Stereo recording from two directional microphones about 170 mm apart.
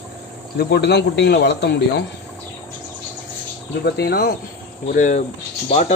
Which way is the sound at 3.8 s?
70° left (ahead or behind).